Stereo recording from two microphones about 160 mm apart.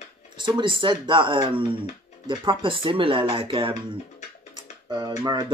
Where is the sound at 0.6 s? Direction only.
30° right (ahead or behind).